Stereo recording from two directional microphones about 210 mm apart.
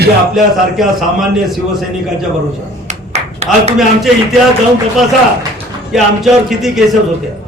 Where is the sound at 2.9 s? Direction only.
30° right (ahead or behind).